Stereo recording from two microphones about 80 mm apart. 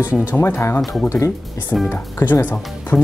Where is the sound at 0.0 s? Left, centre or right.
Centre.